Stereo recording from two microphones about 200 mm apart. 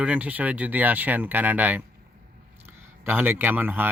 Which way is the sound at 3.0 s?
10° right (ahead or behind).